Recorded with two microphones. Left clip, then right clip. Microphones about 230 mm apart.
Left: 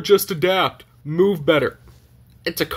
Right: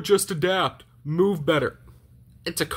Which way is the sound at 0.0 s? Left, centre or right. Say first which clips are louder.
Left 5 dB; centre.